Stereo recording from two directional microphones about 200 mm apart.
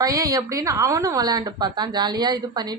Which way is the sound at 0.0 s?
15° right (ahead or behind).